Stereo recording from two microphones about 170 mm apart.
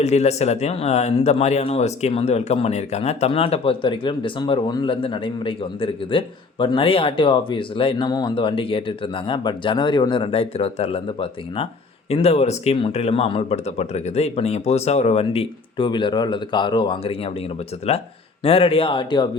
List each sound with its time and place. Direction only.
0.0 s speech: 40° left (ahead or behind)
18.4 s speech: 35° left (ahead or behind)